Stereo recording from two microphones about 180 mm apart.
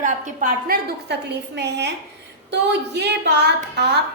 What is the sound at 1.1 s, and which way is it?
A woman's voice, 70° right (ahead or behind).